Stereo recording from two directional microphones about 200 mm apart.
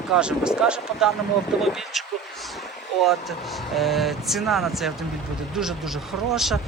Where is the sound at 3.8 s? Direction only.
Centre (ahead or behind).